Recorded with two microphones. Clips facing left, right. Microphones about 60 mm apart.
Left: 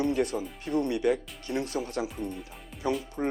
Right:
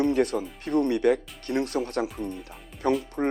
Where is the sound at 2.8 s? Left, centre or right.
Right.